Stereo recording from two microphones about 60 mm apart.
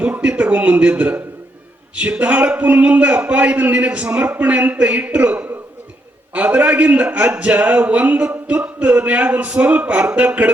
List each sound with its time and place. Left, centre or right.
0.0 s a man's voice: right